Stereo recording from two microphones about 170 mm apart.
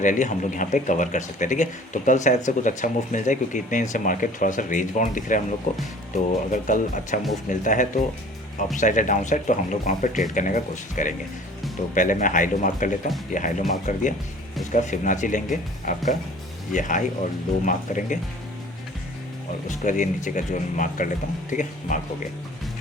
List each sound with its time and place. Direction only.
0.0 s speech: 45° left (ahead or behind)
19.6 s speech: 50° left (ahead or behind)